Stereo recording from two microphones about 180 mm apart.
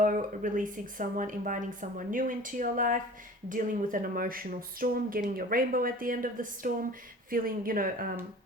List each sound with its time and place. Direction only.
0.0 s speech: 45° right (ahead or behind)